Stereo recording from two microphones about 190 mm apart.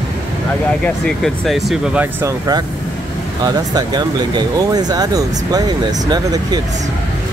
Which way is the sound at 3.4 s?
20° right (ahead or behind).